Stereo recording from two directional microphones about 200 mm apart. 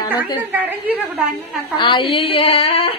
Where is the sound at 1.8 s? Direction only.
25° left (ahead or behind).